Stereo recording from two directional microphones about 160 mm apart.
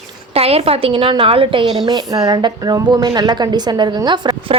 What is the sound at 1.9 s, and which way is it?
A woman's voice, 25° right (ahead or behind).